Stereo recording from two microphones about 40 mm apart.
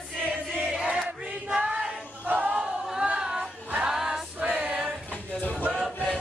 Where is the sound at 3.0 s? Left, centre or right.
Right.